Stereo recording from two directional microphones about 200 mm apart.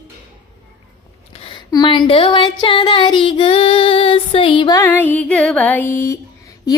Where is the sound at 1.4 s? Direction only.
25° left (ahead or behind).